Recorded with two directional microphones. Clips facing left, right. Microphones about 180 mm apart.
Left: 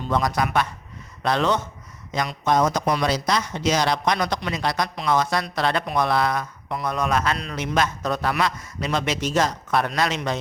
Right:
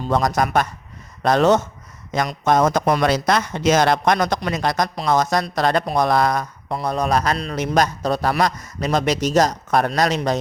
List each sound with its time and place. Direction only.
0.0 s a man's voice: 45° right (ahead or behind)